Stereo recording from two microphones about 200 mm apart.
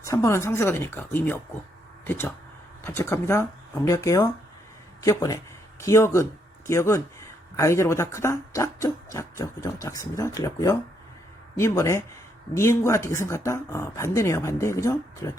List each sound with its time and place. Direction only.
0.0 s speech: 15° left (ahead or behind)